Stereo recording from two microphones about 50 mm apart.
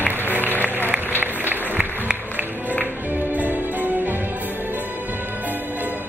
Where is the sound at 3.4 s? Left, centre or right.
Right.